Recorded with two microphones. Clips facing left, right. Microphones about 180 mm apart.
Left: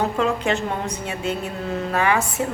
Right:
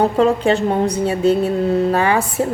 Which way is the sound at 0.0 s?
35° right (ahead or behind).